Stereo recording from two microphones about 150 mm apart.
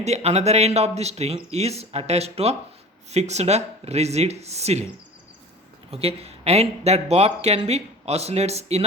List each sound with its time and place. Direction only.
0.0 s speech: 45° right (ahead or behind)
5.9 s speech: 40° right (ahead or behind)